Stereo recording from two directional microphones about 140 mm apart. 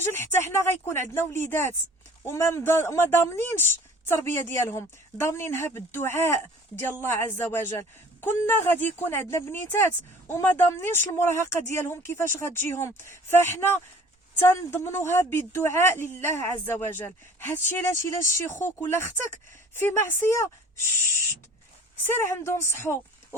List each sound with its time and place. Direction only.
0.0 s speech: 15° left (ahead or behind)
22.0 s a woman's voice: 15° left (ahead or behind)